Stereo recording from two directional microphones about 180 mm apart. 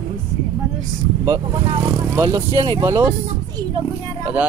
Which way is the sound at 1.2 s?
25° right (ahead or behind).